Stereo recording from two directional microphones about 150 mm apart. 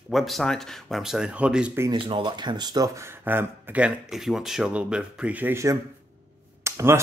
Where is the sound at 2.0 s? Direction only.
35° right (ahead or behind).